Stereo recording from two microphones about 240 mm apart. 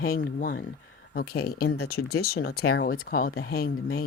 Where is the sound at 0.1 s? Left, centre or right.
Left.